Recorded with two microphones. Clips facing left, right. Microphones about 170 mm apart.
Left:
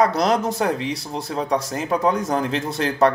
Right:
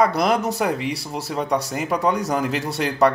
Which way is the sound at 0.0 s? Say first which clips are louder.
Even; centre (ahead or behind).